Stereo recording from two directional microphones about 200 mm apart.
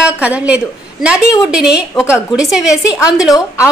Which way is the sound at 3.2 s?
15° left (ahead or behind).